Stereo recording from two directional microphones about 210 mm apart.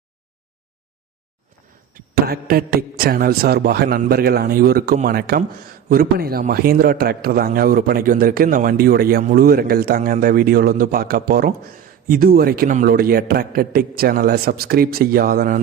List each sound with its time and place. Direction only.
1.9 s a man's voice: 45° right (ahead or behind)